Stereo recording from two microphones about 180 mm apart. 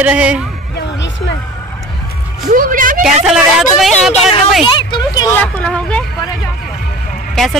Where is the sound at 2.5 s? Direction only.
50° right (ahead or behind).